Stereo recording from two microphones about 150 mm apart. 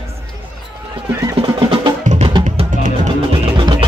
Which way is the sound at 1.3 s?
35° right (ahead or behind).